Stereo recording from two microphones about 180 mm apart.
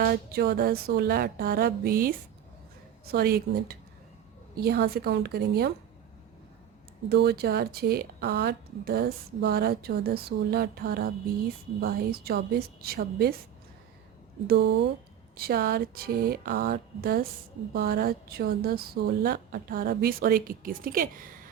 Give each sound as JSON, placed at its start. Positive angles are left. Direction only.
{"t": 0.0, "sound": "a woman's voice", "side_deg": -60}
{"t": 7.1, "sound": "a woman's voice", "side_deg": -60}
{"t": 14.4, "sound": "speech", "side_deg": -65}
{"t": 15.4, "sound": "a woman's voice", "side_deg": -55}